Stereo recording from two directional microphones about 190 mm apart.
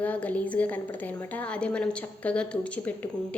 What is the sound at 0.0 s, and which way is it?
A woman's voice, 10° left (ahead or behind).